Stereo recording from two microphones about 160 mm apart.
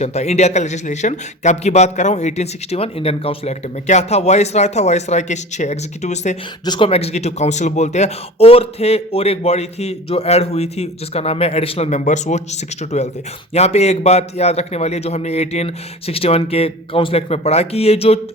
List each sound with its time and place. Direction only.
0.0 s a man's voice: 45° left (ahead or behind)
6.7 s speech: 35° left (ahead or behind)